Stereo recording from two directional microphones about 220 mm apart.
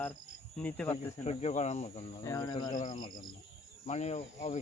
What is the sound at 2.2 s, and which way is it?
Speech, 15° left (ahead or behind).